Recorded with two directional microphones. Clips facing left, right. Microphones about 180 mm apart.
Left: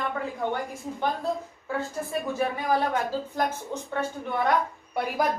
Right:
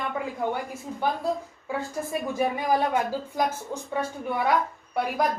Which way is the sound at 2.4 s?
10° right (ahead or behind).